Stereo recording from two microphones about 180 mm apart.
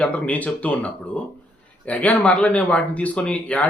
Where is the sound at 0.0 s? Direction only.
10° left (ahead or behind).